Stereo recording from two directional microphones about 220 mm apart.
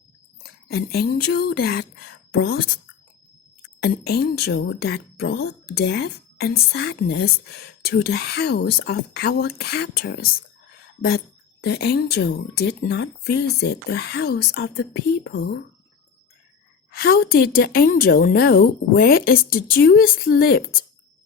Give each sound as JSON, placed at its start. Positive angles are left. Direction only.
{"t": 0.4, "sound": "speech", "side_deg": 45}
{"t": 3.8, "sound": "speech", "side_deg": 45}
{"t": 11.6, "sound": "speech", "side_deg": 50}
{"t": 16.9, "sound": "speech", "side_deg": 45}